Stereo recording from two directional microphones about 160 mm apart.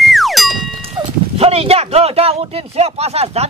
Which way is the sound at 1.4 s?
40° right (ahead or behind).